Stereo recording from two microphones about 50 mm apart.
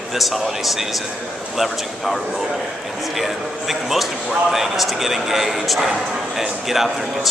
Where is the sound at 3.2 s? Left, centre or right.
Centre.